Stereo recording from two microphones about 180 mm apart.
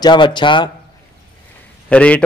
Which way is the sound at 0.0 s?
25° left (ahead or behind).